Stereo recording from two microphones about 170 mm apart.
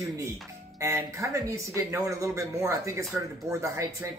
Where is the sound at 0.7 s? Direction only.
15° right (ahead or behind).